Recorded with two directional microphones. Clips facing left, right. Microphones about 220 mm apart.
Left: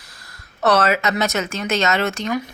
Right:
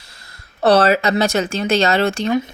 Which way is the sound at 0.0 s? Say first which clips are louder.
Even; 25° right (ahead or behind).